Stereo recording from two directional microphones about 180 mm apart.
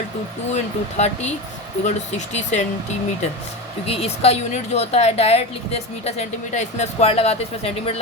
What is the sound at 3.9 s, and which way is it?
A woman's voice, 35° left (ahead or behind).